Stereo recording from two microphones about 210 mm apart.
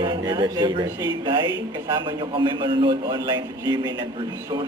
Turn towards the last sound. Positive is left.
turn(degrees=-15)  # may be behind; listen again after turning